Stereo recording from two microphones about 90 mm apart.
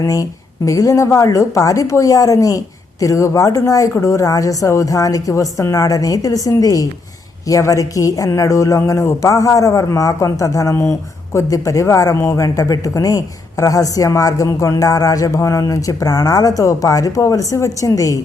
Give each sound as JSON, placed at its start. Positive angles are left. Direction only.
{"t": 0.0, "sound": "a woman's voice", "side_deg": 40}